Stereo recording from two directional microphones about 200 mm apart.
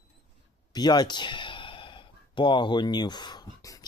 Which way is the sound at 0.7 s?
20° left (ahead or behind).